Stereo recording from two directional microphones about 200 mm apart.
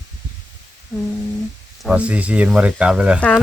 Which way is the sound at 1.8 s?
5° right (ahead or behind).